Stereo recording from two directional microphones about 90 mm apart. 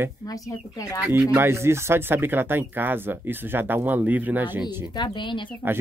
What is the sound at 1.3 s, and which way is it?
Speech, 30° right (ahead or behind).